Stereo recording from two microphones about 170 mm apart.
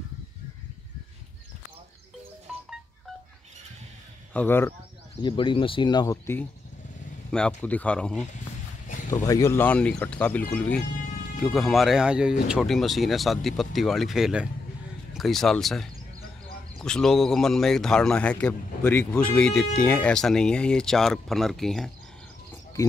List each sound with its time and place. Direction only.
2.5 s music: 5° right (ahead or behind)
4.3 s speech: 10° left (ahead or behind)
5.2 s speech: 30° left (ahead or behind)
7.2 s speech: 5° left (ahead or behind)
8.8 s a sound: 50° left (ahead or behind)
9.2 s speech: 20° left (ahead or behind); by 21.9 s centre (ahead or behind)
22.8 s a sound: 20° left (ahead or behind)